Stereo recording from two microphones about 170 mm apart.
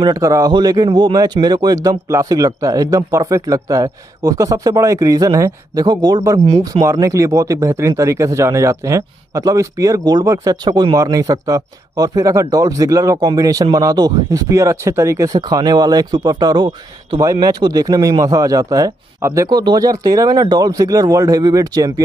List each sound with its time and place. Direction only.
0.0 s speech: 20° right (ahead or behind)